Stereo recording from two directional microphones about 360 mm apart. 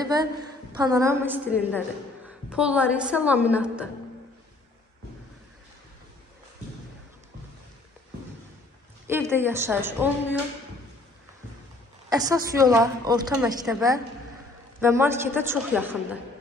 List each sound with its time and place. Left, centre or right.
0.0 s a woman's voice: centre
9.0 s a woman's voice: centre
12.1 s a woman's voice: centre